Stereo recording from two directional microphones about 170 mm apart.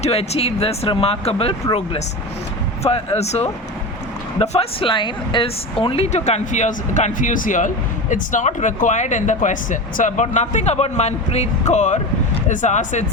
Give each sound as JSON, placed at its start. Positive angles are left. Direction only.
{"t": 0.0, "sound": "speech", "side_deg": 35}
{"t": 2.8, "sound": "speech", "side_deg": 35}